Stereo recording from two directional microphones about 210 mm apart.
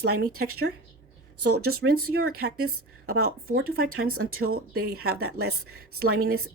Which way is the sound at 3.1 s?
90° right.